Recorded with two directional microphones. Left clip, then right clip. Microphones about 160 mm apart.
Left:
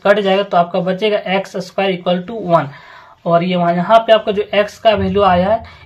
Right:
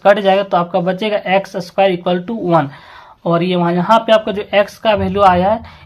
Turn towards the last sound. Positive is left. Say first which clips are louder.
# right 1 dB
turn(degrees=-40)  # may be behind; listen again after turning